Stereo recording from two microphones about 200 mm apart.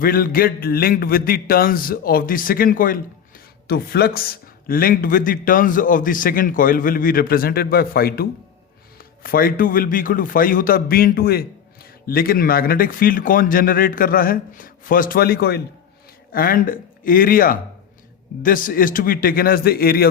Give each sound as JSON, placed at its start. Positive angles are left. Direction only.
{"t": 0.0, "sound": "a man's voice", "side_deg": 45}